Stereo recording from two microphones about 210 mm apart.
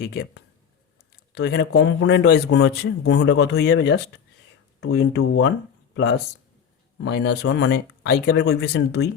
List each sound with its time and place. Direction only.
0.0 s speech: 50° left (ahead or behind)